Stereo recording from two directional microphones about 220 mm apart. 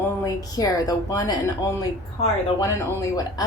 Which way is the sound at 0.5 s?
15° left (ahead or behind).